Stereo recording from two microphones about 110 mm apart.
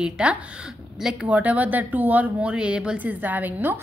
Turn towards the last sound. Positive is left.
turn(degrees=-15)  # may be behind; listen again after turning